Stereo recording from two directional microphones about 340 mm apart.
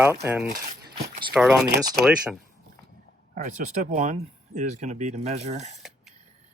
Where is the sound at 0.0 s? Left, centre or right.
Centre.